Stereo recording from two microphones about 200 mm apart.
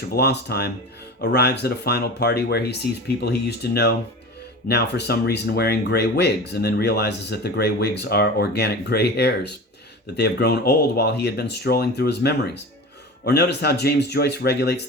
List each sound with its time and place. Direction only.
0.1 s speech: 55° left (ahead or behind)